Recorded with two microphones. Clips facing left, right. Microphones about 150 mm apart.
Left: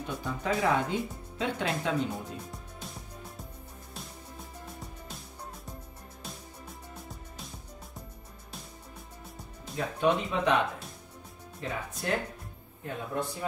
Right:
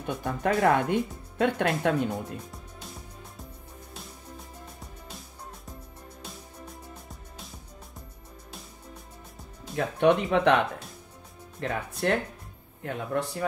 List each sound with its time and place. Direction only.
0.0 s speech: 55° right (ahead or behind)
2.1 s speech: centre (ahead or behind)
9.9 s speech: 65° right (ahead or behind)
11.6 s speech: 65° right (ahead or behind)